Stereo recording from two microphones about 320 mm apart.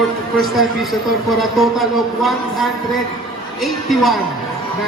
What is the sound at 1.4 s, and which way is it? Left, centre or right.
Speech, centre.